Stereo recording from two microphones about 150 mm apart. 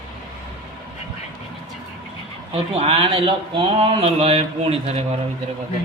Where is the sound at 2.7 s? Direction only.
45° right (ahead or behind).